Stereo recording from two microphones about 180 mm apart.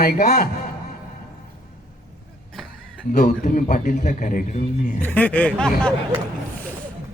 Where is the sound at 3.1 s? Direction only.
45° left (ahead or behind).